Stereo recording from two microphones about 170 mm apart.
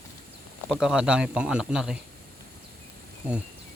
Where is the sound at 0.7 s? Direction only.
5° right (ahead or behind).